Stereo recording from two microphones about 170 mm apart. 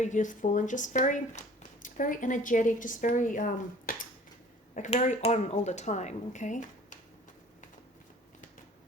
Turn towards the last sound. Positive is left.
turn(degrees=45)  # may be behind; listen again after turning